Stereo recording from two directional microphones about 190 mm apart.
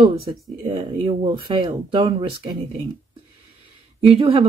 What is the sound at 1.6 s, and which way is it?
Speech, 25° right (ahead or behind).